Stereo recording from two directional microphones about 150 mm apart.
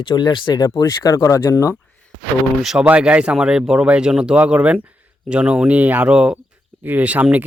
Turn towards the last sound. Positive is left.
turn(degrees=-10)  # may be behind; listen again after turning